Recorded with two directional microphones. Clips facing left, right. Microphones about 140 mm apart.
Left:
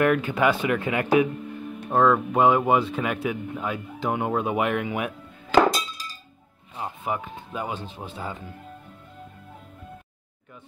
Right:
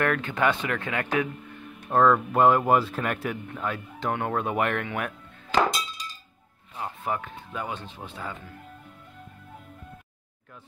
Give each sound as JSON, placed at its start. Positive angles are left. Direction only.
{"t": 0.0, "sound": "speech", "side_deg": 10}
{"t": 1.9, "sound": "speech", "side_deg": 5}
{"t": 7.5, "sound": "speech", "side_deg": 20}